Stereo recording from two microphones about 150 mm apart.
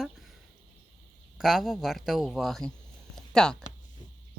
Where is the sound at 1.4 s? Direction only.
Centre (ahead or behind).